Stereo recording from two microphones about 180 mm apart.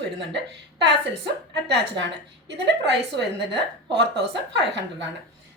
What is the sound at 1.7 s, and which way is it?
Speech, 85° right.